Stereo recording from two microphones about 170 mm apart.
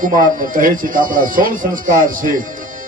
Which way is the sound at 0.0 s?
50° right (ahead or behind).